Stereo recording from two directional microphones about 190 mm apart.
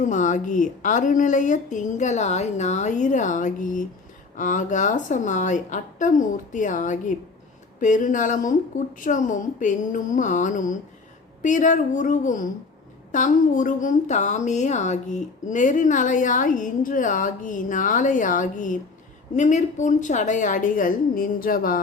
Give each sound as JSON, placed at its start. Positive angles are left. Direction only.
{"t": 0.0, "sound": "speech", "side_deg": 40}